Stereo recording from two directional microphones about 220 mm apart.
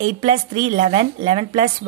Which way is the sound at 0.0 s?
30° right (ahead or behind).